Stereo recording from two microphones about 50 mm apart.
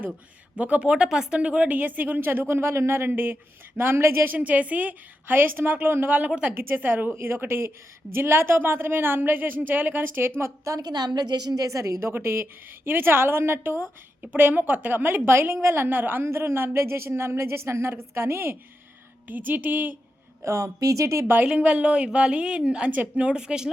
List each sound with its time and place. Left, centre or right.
0.6 s a woman's voice: right
1.4 s a woman's voice: right
1.6 s a woman's voice: right
4.3 s a woman's voice: right
5.3 s a woman's voice: right
7.2 s a woman's voice: right
11.7 s speech: right
12.1 s a woman's voice: right
14.5 s a woman's voice: right
16.2 s a woman's voice: right
19.3 s a woman's voice: right
20.4 s speech: right
21.4 s a woman's voice: right